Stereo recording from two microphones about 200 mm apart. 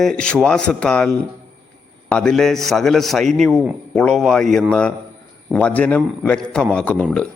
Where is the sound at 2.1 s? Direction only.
5° left (ahead or behind).